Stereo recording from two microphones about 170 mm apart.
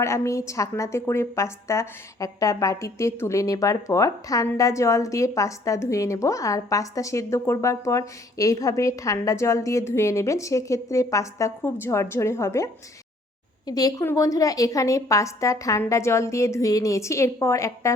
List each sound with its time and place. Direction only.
0.0 s a woman's voice: 15° left (ahead or behind)